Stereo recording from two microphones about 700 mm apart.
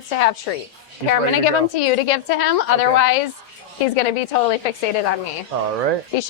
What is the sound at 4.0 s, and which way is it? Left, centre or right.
Speech, left.